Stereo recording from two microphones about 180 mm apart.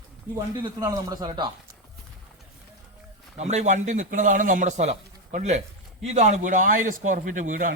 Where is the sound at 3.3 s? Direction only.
40° right (ahead or behind).